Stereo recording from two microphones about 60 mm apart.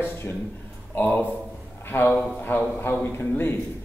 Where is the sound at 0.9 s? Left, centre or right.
Left.